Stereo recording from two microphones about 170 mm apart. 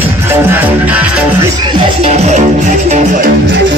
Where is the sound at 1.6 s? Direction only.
35° right (ahead or behind).